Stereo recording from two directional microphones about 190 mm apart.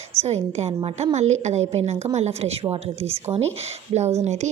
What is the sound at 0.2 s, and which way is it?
A woman's voice, 35° right (ahead or behind).